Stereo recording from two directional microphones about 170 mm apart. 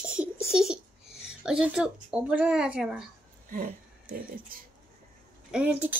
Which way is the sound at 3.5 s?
55° right (ahead or behind).